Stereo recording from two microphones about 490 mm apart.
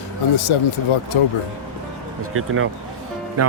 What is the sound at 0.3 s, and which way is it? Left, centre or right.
Speech, left.